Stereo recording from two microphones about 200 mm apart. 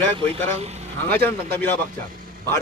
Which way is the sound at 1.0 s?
10° left (ahead or behind).